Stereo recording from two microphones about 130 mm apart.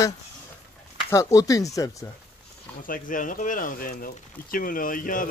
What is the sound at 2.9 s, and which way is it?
Speech, 90° left.